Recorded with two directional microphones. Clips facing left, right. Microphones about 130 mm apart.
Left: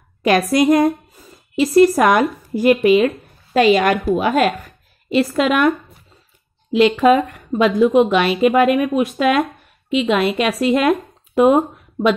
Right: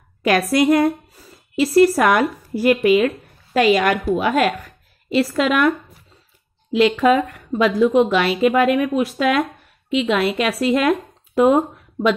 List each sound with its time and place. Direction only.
0.2 s a woman's voice: 25° left (ahead or behind)